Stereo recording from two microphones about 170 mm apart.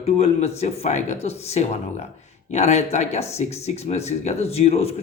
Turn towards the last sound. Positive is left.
turn(degrees=35)  # may be behind; listen again after turning